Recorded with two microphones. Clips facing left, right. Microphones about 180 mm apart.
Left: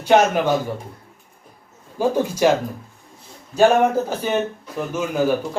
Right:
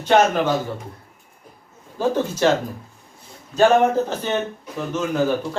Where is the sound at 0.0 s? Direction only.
10° left (ahead or behind).